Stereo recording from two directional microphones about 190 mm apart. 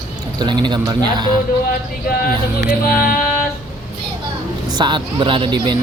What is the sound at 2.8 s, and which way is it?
Music, 50° left (ahead or behind).